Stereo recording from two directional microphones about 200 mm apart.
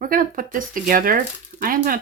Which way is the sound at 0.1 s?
45° right (ahead or behind).